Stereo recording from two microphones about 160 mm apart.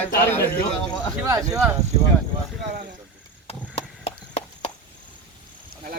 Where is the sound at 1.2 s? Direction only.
20° right (ahead or behind).